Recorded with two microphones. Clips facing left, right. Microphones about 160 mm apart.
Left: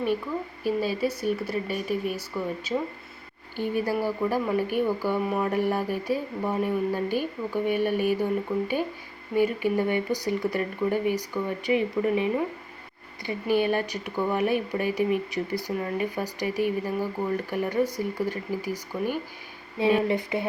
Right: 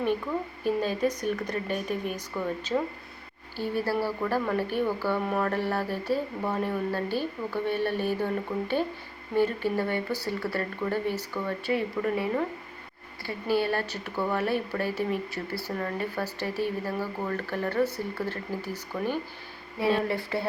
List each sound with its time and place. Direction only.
0.6 s speech: 10° left (ahead or behind)